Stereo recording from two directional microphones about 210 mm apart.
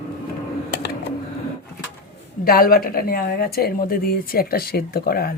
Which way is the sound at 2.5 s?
45° left (ahead or behind).